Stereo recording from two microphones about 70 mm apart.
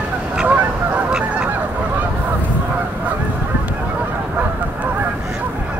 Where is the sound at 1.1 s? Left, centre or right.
Centre.